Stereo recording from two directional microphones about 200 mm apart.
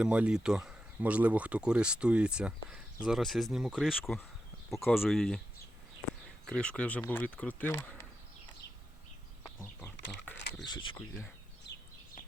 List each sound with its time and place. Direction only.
0.0 s speech: 5° right (ahead or behind)
4.7 s speech: 10° left (ahead or behind)
5.0 s speech: centre (ahead or behind)
6.4 s speech: 5° left (ahead or behind)
9.4 s a sound: 10° left (ahead or behind)
10.3 s a sound: 60° left (ahead or behind)